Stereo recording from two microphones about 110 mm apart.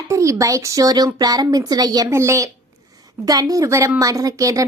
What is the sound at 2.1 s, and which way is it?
A woman's voice, 25° right (ahead or behind).